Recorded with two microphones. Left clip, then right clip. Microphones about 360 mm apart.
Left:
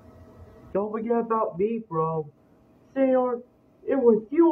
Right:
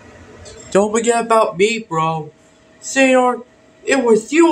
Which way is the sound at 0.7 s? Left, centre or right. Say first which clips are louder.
Right 12 dB; left.